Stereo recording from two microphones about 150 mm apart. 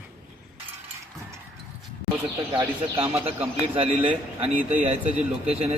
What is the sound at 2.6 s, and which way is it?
Speech, 20° right (ahead or behind).